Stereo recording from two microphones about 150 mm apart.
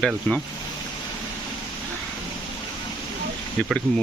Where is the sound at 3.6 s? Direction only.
5° left (ahead or behind).